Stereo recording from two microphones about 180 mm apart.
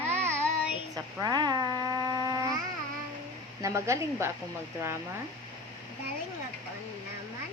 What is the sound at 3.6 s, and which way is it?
Speech, 15° right (ahead or behind).